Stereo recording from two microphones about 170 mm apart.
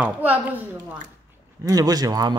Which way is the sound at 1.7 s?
20° right (ahead or behind).